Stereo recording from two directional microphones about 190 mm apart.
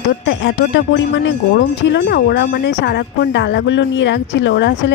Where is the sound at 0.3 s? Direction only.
70° left (ahead or behind).